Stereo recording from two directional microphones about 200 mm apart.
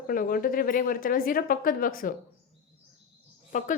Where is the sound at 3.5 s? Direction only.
40° left (ahead or behind).